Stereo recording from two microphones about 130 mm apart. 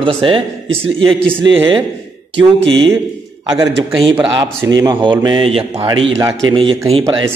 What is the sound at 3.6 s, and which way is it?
Speech, 40° right (ahead or behind).